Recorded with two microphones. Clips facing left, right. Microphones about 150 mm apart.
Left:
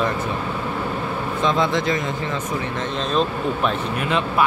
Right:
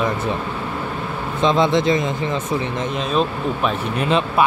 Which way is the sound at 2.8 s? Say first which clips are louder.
Even; 10° right (ahead or behind).